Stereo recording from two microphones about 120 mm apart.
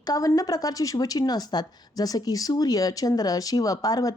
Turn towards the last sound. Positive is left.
turn(degrees=30)  # may be behind; listen again after turning